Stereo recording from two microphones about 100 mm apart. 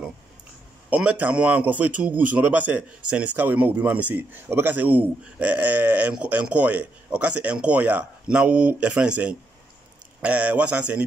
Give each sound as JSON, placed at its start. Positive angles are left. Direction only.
{"t": 0.8, "sound": "a man's voice", "side_deg": -15}